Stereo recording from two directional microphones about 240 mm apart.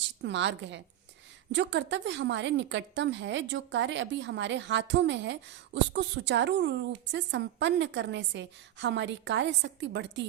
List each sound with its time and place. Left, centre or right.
0.2 s a woman's voice: right